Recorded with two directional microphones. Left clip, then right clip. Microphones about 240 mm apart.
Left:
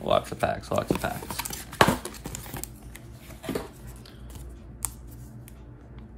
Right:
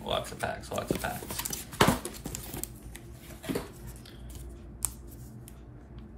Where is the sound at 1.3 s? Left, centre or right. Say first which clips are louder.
Left 3 dB; centre.